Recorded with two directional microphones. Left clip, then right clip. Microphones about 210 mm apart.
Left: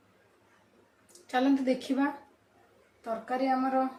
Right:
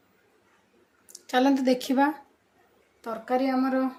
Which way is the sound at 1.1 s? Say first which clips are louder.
Right 4 dB; 50° right (ahead or behind).